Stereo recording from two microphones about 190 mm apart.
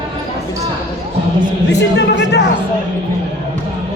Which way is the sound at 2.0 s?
65° left (ahead or behind).